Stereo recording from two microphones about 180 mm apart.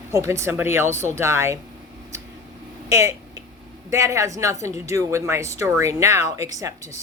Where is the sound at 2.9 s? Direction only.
15° right (ahead or behind).